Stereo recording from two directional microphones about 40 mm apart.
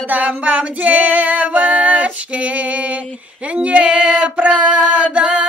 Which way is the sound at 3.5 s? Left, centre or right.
Right.